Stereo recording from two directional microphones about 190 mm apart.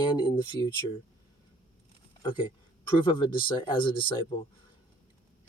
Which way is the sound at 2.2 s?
25° left (ahead or behind).